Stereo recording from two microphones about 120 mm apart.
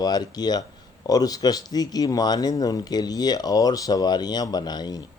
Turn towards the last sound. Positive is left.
turn(degrees=35)  # may be behind; listen again after turning